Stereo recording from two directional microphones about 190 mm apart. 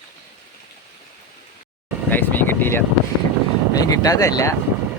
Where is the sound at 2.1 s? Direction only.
10° left (ahead or behind).